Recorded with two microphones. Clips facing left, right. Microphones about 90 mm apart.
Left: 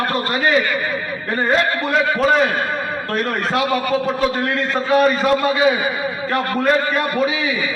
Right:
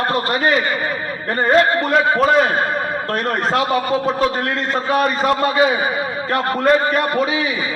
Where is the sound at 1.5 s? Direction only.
45° right (ahead or behind).